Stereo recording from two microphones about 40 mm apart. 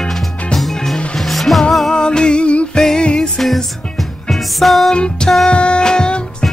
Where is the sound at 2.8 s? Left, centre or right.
Centre.